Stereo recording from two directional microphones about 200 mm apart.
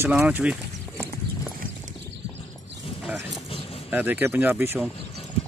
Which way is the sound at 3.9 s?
10° right (ahead or behind).